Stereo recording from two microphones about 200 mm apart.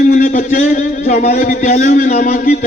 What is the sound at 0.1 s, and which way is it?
A man's voice, 35° left (ahead or behind).